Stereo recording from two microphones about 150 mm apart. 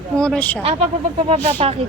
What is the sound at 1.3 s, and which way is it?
Speech, 50° right (ahead or behind).